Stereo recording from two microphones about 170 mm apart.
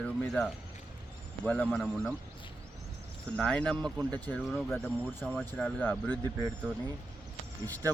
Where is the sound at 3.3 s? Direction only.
5° left (ahead or behind).